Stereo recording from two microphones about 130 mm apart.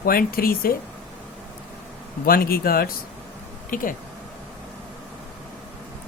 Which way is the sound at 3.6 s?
90° left.